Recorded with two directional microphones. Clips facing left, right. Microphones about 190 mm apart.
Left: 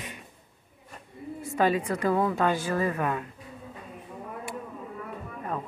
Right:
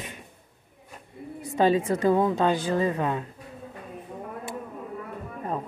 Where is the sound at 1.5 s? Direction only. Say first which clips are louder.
Right 3 dB; 25° right (ahead or behind).